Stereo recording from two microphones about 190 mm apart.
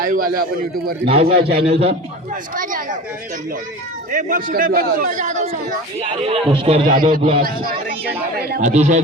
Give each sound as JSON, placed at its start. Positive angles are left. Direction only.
{"t": 0.0, "sound": "a man's voice", "side_deg": -45}
{"t": 1.0, "sound": "speech", "side_deg": -30}
{"t": 1.3, "sound": "a man's voice", "side_deg": -55}
{"t": 1.6, "sound": "speech", "side_deg": -30}
{"t": 2.6, "sound": "a man's voice", "side_deg": -45}
{"t": 4.1, "sound": "a man's voice", "side_deg": -45}
{"t": 6.8, "sound": "a man's voice", "side_deg": -45}
{"t": 8.6, "sound": "speech", "side_deg": -40}